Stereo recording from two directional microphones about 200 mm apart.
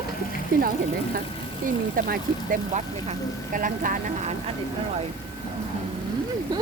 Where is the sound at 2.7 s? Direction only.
40° right (ahead or behind).